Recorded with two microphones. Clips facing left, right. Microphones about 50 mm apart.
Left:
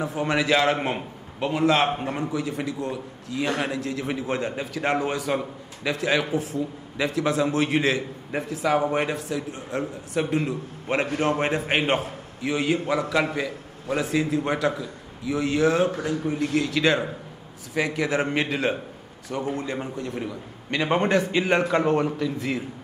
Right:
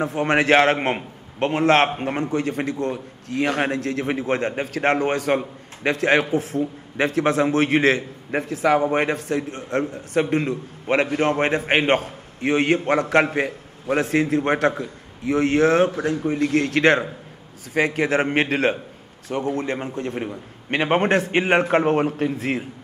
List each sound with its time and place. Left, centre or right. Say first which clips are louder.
0.0 s a man's voice: right 4 dB; right